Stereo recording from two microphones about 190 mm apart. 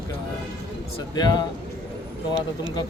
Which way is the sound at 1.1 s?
20° left (ahead or behind).